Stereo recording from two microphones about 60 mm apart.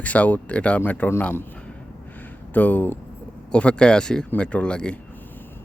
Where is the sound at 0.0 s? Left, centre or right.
Left.